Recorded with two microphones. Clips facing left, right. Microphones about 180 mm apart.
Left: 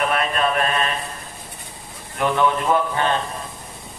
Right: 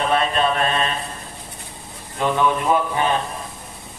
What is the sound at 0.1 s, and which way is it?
Mantra, 30° right (ahead or behind).